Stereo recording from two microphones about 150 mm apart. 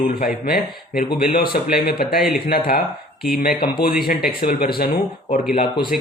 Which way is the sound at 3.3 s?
85° left.